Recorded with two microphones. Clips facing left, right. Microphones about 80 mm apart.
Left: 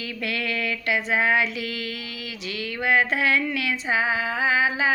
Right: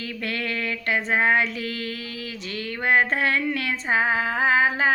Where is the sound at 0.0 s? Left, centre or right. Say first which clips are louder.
Even; right.